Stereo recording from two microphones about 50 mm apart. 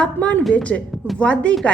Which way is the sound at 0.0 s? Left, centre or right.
Left.